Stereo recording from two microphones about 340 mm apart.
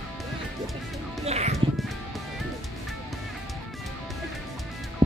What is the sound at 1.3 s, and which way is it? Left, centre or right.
Music, centre.